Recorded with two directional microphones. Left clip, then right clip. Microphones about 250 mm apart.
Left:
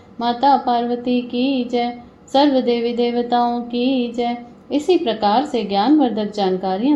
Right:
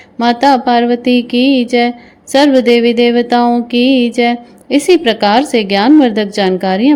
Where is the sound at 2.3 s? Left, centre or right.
Right.